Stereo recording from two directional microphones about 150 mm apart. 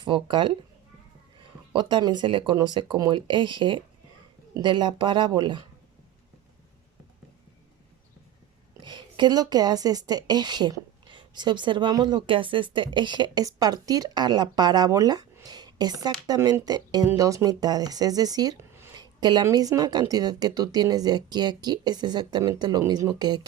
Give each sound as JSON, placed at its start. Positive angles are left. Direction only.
{"t": 0.0, "sound": "speech", "side_deg": -30}
{"t": 1.7, "sound": "speech", "side_deg": -30}
{"t": 8.8, "sound": "a woman's voice", "side_deg": -30}